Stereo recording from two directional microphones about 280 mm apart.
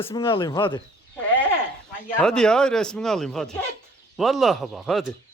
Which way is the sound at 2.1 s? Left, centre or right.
Centre.